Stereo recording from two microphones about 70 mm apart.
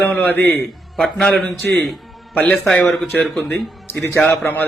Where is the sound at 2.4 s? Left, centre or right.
Centre.